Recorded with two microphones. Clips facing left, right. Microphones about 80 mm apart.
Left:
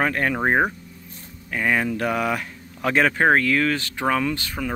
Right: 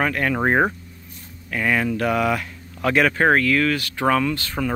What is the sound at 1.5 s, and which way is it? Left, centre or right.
Speech, centre.